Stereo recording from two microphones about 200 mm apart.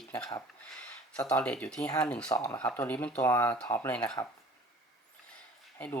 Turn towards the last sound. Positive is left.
turn(degrees=10)  # may be behind; listen again after turning